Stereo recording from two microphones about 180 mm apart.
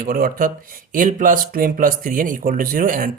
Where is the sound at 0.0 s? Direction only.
50° right (ahead or behind).